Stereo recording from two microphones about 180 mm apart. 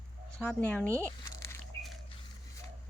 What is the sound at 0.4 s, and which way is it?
Speech, 10° left (ahead or behind).